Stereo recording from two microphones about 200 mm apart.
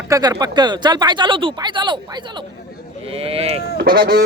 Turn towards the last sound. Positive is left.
turn(degrees=-50)  # may be behind; listen again after turning